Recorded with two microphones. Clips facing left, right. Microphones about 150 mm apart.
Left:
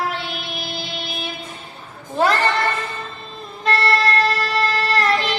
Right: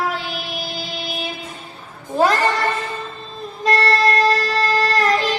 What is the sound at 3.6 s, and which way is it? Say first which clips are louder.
Music: right 2 dB; 35° right (ahead or behind).